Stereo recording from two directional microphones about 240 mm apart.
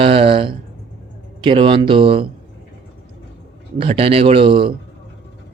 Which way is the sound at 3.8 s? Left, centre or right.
Right.